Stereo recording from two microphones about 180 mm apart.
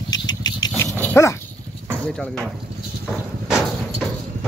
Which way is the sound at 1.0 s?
15° left (ahead or behind).